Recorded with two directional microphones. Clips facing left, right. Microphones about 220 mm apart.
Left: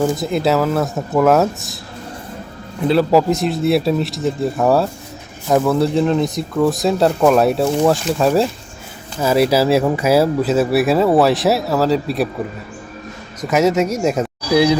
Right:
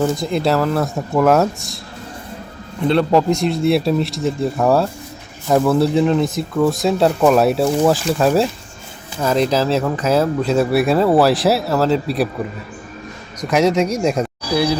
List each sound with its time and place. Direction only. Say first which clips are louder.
0.0 s speech: left 1 dB; centre (ahead or behind)
2.8 s speech: left 1 dB; 5° left (ahead or behind)
13.4 s speech: even; centre (ahead or behind)
14.5 s speech: left 4 dB; 20° left (ahead or behind)